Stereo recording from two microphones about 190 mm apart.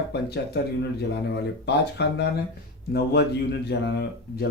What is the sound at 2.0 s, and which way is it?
Speech, 60° left (ahead or behind).